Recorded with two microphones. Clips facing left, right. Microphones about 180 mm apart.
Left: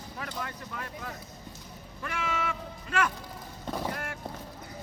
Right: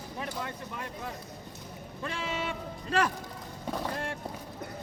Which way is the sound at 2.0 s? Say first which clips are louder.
Left 1 dB; 30° right (ahead or behind).